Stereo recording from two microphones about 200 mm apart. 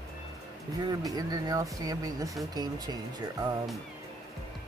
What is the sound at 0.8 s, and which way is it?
Speech, 20° right (ahead or behind).